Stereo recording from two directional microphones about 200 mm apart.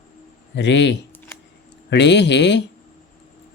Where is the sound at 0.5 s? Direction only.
65° left (ahead or behind).